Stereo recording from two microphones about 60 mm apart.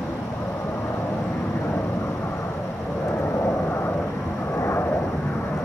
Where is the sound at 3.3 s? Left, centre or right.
Left.